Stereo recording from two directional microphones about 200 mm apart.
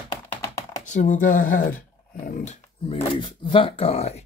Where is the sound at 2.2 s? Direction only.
40° left (ahead or behind).